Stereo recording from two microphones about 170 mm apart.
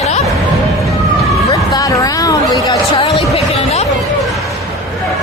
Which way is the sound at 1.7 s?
20° left (ahead or behind).